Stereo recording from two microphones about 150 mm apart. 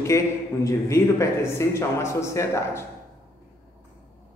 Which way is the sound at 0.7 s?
20° left (ahead or behind).